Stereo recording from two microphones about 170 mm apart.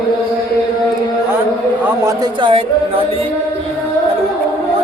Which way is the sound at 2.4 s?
30° right (ahead or behind).